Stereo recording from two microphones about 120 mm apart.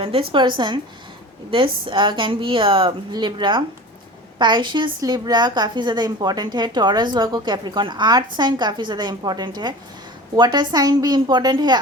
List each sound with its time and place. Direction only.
0.0 s a woman's voice: 50° right (ahead or behind)